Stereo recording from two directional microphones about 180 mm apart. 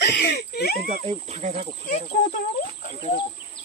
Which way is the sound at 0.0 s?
70° left (ahead or behind).